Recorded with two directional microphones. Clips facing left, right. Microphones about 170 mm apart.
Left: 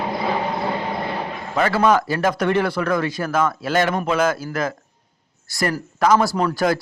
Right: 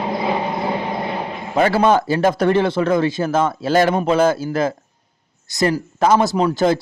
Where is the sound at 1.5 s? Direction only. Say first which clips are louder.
Right 3 dB; 30° right (ahead or behind).